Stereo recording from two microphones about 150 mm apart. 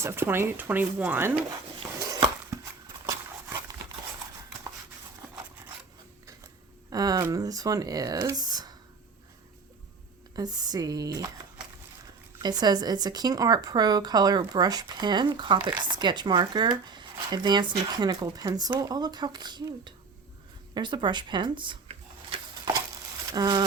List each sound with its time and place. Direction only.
0.0 s speech: 15° right (ahead or behind)
2.0 s a sound: 20° right (ahead or behind)
3.1 s dog: 20° right (ahead or behind)
6.9 s speech: 25° right (ahead or behind)
10.3 s speech: 25° right (ahead or behind)
12.4 s speech: 30° right (ahead or behind)
20.7 s a sound: 30° right (ahead or behind)
23.3 s speech: 25° right (ahead or behind)